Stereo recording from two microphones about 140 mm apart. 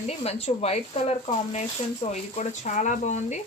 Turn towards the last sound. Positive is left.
turn(degrees=60)  # may be behind; listen again after turning